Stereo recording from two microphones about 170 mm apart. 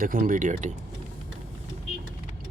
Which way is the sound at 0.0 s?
55° right (ahead or behind).